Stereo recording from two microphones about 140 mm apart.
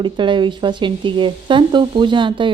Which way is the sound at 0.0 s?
35° right (ahead or behind).